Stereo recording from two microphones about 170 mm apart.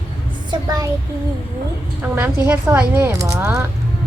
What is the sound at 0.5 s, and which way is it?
Speech, 25° right (ahead or behind).